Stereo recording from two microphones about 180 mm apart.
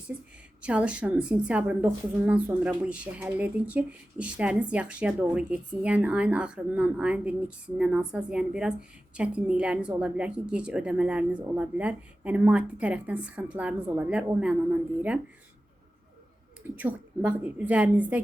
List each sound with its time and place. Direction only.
0.6 s a woman's voice: 5° right (ahead or behind)
16.7 s a woman's voice: 10° right (ahead or behind)